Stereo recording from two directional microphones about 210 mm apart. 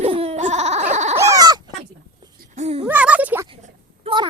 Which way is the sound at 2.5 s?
30° right (ahead or behind).